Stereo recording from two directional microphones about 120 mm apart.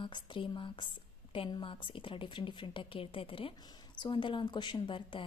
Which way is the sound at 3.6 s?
35° left (ahead or behind).